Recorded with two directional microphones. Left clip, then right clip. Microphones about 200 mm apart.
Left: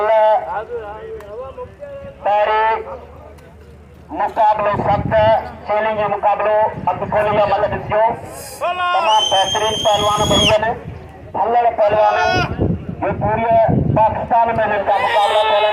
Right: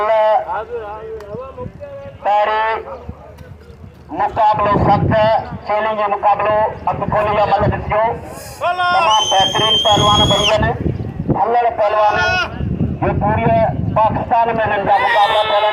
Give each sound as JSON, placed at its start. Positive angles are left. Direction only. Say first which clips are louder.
{"t": 0.0, "sound": "a sound", "louder": "even", "side_deg": -45}
{"t": 2.2, "sound": "a sound", "louder": "even", "side_deg": -45}
{"t": 4.1, "sound": "a man's voice", "louder": "right 1 dB", "side_deg": -45}
{"t": 12.1, "sound": "speech", "louder": "even", "side_deg": 10}
{"t": 13.0, "sound": "a man's voice", "louder": "right 1 dB", "side_deg": -50}
{"t": 14.9, "sound": "speech", "louder": "right 3 dB", "side_deg": -10}